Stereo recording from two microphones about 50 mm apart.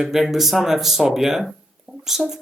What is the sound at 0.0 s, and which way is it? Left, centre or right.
Speech, centre.